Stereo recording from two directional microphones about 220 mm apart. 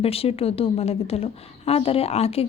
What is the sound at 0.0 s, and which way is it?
A woman's voice, 25° left (ahead or behind).